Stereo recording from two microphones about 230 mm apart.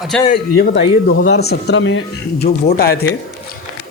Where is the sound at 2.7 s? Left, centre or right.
Left.